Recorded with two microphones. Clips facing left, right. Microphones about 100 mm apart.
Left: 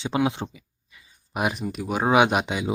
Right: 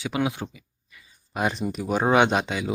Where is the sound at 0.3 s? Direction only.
25° left (ahead or behind).